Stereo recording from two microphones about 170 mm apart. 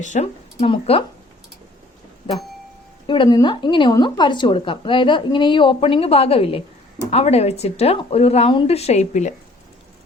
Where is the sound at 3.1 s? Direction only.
25° left (ahead or behind); by 9.3 s 45° left (ahead or behind).